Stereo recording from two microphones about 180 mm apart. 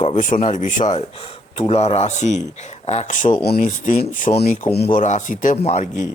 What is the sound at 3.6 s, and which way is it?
Speech, 45° left (ahead or behind).